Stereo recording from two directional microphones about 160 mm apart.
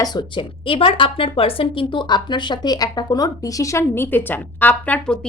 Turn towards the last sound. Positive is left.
turn(degrees=5)  # may be behind; listen again after turning